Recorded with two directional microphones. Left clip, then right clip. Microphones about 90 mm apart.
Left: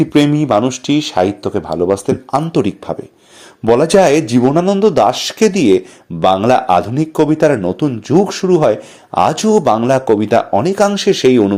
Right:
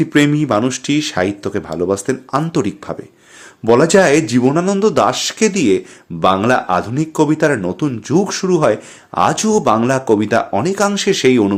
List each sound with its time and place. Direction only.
0.0 s speech: 15° left (ahead or behind)
0.6 s speech: 5° left (ahead or behind)
3.8 s speech: 30° left (ahead or behind)